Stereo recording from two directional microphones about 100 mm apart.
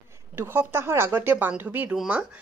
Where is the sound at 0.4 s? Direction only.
25° right (ahead or behind).